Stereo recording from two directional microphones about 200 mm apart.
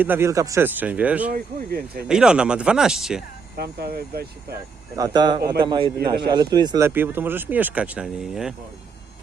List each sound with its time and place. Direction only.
0.0 s speech: 10° right (ahead or behind)
1.3 s speech: 50° right (ahead or behind)
2.0 s speech: 5° right (ahead or behind)
3.6 s speech: 50° right (ahead or behind)
4.9 s a man's voice: 20° right (ahead or behind); by 8.5 s 5° right (ahead or behind)